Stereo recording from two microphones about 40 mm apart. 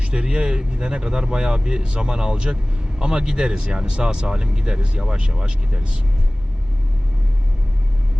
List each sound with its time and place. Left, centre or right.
0.0 s speech: right